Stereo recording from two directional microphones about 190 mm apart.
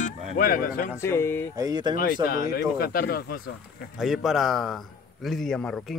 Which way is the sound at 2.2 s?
50° left (ahead or behind).